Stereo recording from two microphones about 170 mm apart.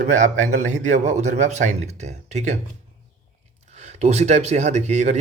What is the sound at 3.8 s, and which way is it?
Speech, 40° right (ahead or behind).